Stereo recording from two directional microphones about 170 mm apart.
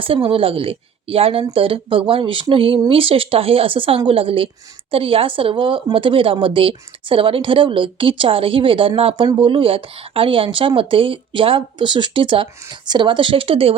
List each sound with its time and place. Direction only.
0.0 s speech: 30° right (ahead or behind)